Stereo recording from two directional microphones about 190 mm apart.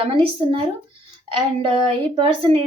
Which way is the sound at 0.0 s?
25° right (ahead or behind).